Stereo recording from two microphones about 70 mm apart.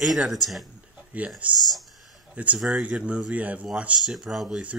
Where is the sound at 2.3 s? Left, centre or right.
Centre.